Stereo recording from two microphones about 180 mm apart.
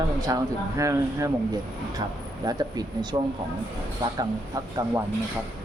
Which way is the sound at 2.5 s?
20° right (ahead or behind).